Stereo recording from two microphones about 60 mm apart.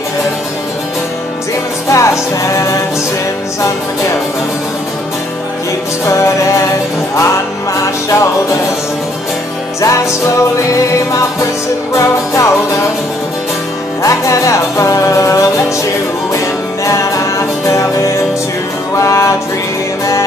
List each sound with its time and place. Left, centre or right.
1.9 s music: left
6.0 s music: left
7.8 s music: left
9.8 s music: left
11.9 s music: left
14.0 s music: left
17.6 s music: left